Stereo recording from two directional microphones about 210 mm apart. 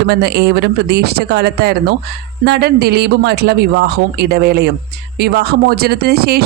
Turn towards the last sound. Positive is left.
turn(degrees=-50)  # may be behind; listen again after turning